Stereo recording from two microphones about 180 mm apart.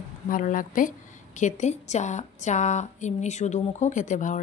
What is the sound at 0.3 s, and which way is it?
A woman's voice, 50° left (ahead or behind).